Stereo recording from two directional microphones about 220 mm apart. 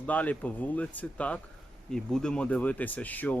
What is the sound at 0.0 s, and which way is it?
Speech, 5° left (ahead or behind).